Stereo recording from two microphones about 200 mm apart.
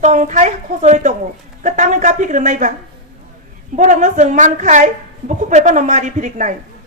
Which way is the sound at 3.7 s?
40° right (ahead or behind).